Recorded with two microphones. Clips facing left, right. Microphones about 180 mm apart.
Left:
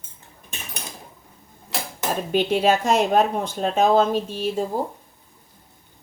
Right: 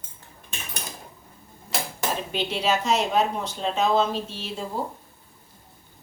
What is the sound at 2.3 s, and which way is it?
Speech, 50° left (ahead or behind).